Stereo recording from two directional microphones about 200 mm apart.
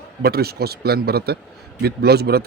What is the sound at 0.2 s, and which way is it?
Speech, 50° right (ahead or behind).